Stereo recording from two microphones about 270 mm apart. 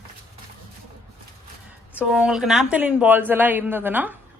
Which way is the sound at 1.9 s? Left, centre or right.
Centre.